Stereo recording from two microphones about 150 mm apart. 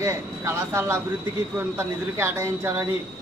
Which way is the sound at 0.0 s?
20° right (ahead or behind).